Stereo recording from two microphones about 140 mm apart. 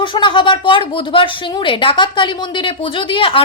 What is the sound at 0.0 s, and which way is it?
Speech, 35° left (ahead or behind).